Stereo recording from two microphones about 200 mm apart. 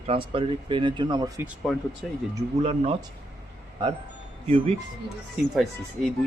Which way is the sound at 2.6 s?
30° right (ahead or behind).